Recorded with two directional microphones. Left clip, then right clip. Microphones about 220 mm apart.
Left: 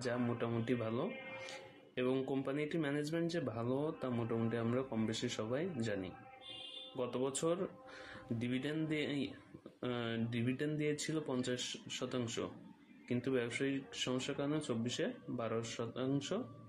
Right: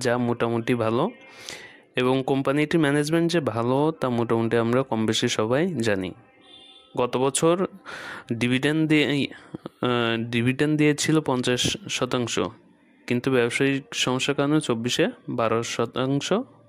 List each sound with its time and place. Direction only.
0.0 s speech: 50° right (ahead or behind)